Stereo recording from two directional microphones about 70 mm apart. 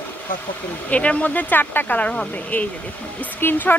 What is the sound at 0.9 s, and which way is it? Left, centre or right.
Speech, centre.